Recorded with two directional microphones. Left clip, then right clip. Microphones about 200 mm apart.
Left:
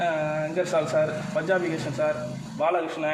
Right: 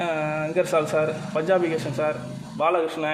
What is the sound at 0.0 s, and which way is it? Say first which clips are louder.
A man's voice: even; 50° right (ahead or behind).